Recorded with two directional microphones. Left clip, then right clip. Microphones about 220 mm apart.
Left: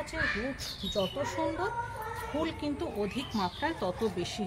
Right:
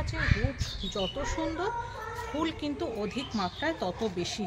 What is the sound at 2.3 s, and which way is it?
Speech, 50° right (ahead or behind).